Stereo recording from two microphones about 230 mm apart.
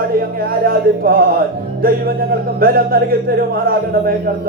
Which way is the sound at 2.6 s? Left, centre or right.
Right.